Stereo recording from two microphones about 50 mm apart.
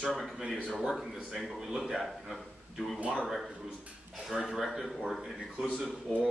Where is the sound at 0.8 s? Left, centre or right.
Centre.